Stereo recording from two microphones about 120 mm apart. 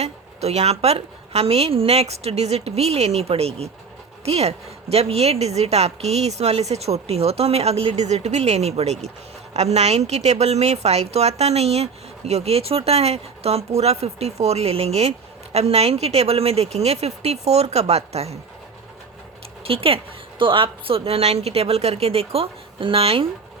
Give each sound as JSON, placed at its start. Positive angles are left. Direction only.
{"t": 0.0, "sound": "a woman's voice", "side_deg": -65}
{"t": 19.6, "sound": "a woman's voice", "side_deg": -50}